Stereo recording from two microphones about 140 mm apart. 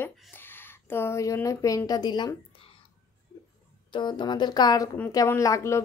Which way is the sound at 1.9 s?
30° left (ahead or behind).